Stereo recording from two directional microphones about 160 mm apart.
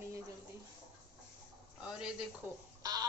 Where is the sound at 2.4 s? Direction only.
15° right (ahead or behind).